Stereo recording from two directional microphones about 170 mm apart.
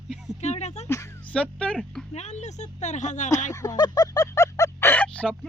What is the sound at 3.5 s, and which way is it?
Speech, 20° left (ahead or behind).